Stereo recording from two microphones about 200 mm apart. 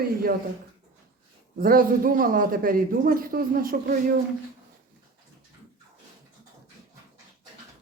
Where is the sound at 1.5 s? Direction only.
45° right (ahead or behind).